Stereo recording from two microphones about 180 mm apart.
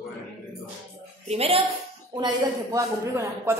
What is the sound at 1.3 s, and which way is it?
Speech, 30° right (ahead or behind).